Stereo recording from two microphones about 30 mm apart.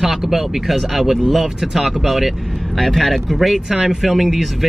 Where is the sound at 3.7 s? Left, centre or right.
Centre.